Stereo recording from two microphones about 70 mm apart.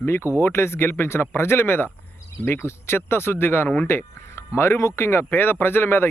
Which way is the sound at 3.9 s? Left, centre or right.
Left.